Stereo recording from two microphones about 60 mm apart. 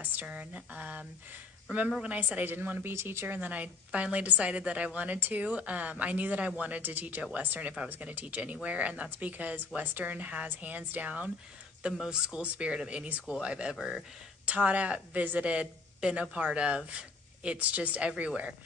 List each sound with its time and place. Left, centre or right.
0.0 s a woman's voice: right
2.0 s a woman's voice: right
2.9 s speech: right
3.3 s a woman's voice: right
11.8 s speech: centre
13.7 s speech: centre
14.4 s a woman's voice: right